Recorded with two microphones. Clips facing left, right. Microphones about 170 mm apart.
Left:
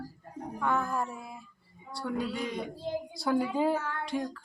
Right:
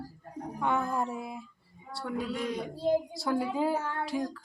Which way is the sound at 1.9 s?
Centre (ahead or behind).